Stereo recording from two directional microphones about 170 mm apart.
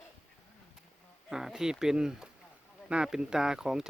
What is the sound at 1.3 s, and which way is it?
Speech, 5° right (ahead or behind).